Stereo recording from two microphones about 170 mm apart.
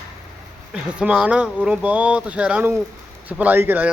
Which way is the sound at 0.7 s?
5° right (ahead or behind).